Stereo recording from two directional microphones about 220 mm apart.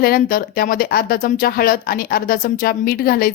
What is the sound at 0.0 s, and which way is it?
A woman's voice, 40° left (ahead or behind).